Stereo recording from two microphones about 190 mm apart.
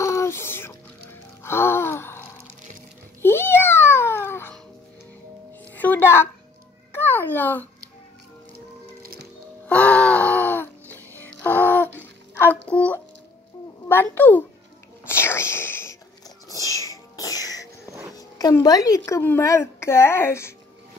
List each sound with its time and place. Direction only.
0.0 s a sound: 15° left (ahead or behind)
1.4 s gasp: 15° left (ahead or behind)
3.2 s babbling: 10° left (ahead or behind)
5.8 s a sound: 10° left (ahead or behind)
9.0 s music: 50° right (ahead or behind)
9.7 s music: 5° left (ahead or behind)
12.0 s a sound: 10° left (ahead or behind)
13.8 s a child's voice: 10° left (ahead or behind)
15.0 s whispering: 15° left (ahead or behind)
16.4 s music: 20° left (ahead or behind)
18.1 s speech: 20° left (ahead or behind)